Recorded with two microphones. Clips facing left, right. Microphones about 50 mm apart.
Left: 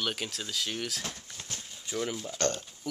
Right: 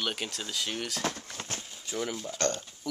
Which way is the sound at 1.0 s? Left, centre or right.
Right.